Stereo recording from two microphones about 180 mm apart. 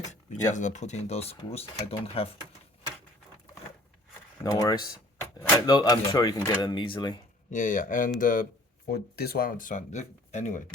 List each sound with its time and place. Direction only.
0.5 s speech: 40° left (ahead or behind)
4.4 s speech: 20° left (ahead or behind)
7.5 s speech: 45° left (ahead or behind)
8.9 s speech: 60° left (ahead or behind); by 10.6 s 40° left (ahead or behind)